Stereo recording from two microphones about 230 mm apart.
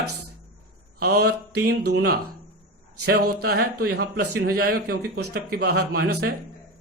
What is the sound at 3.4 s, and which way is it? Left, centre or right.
Speech, right.